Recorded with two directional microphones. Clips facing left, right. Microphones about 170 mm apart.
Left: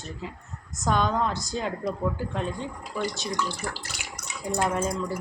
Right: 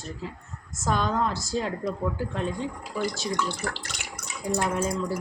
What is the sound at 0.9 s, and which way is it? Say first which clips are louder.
A woman's voice: left 1 dB; 5° right (ahead or behind).